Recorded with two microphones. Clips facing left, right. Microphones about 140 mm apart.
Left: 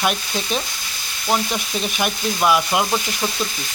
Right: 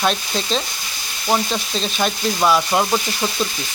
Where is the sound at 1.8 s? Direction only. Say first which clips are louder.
Right 2 dB; 15° left (ahead or behind).